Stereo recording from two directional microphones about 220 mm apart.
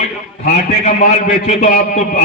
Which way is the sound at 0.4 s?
35° left (ahead or behind).